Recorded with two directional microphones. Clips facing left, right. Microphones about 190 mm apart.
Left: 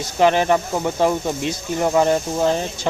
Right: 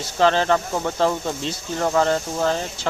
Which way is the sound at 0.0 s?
15° left (ahead or behind).